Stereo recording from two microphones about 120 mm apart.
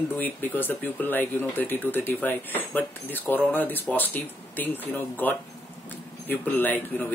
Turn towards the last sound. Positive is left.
turn(degrees=15)  # may be behind; listen again after turning